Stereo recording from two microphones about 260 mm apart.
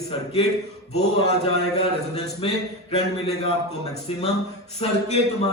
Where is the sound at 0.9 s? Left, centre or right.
Left.